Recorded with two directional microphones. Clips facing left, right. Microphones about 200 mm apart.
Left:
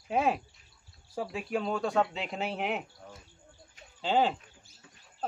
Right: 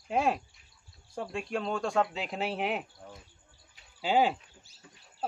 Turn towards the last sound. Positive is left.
turn(degrees=-10)  # may be behind; listen again after turning